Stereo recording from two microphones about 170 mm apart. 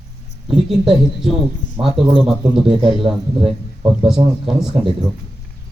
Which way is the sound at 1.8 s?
20° right (ahead or behind).